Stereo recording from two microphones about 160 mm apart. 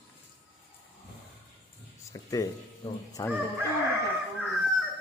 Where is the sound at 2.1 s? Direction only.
20° left (ahead or behind).